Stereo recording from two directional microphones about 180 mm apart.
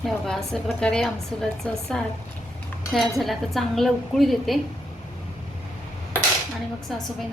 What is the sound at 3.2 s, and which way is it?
A woman's voice, centre (ahead or behind).